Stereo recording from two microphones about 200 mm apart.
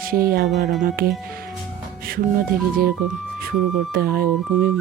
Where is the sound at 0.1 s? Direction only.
50° right (ahead or behind).